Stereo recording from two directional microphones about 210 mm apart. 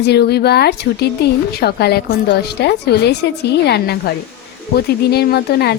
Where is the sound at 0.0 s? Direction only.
50° left (ahead or behind).